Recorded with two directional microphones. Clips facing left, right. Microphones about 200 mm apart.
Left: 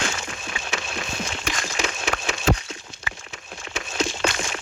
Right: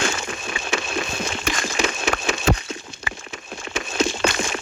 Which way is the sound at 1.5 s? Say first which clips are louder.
Right 5 dB; 55° right (ahead or behind).